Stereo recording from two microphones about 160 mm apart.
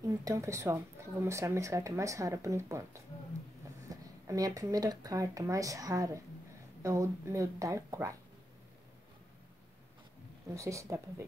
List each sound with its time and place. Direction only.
0.0 s speech: 20° right (ahead or behind)
10.5 s speech: 20° right (ahead or behind)